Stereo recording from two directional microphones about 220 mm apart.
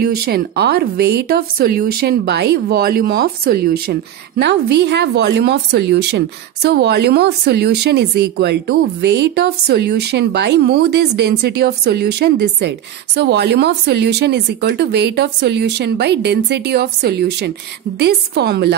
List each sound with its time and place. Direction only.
0.0 s speech: 45° right (ahead or behind)